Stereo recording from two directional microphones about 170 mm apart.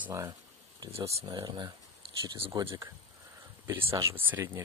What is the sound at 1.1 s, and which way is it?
Speech, 30° right (ahead or behind).